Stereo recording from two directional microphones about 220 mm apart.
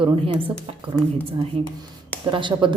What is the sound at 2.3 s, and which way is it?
Speech, 20° right (ahead or behind).